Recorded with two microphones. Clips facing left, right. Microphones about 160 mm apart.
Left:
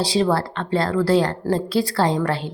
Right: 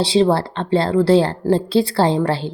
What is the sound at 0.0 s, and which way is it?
A woman's voice, 25° right (ahead or behind).